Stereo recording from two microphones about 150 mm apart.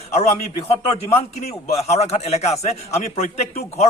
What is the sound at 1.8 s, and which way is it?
A man's voice, 45° left (ahead or behind).